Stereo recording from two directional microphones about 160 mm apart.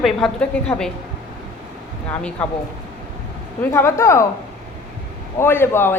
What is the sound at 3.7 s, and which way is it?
Speech, 15° left (ahead or behind).